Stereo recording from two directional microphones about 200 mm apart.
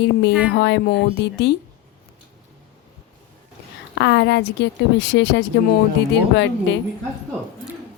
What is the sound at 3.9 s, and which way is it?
A woman's voice, 60° left (ahead or behind).